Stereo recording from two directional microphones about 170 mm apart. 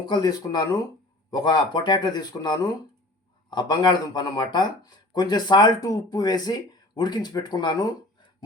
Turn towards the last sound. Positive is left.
turn(degrees=25)  # may be behind; listen again after turning